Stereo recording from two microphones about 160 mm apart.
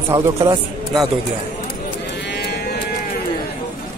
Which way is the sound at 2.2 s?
90° left.